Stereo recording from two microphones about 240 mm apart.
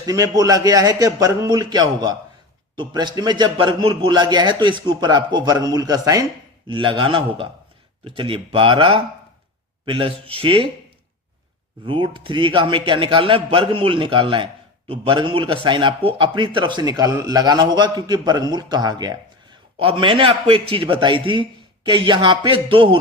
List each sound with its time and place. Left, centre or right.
0.0 s a man's voice: centre
11.9 s a man's voice: centre